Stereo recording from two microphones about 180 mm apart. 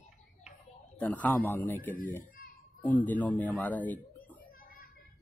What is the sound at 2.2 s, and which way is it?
Children playing, 55° left (ahead or behind).